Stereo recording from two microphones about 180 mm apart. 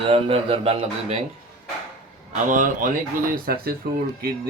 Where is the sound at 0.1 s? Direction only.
30° right (ahead or behind).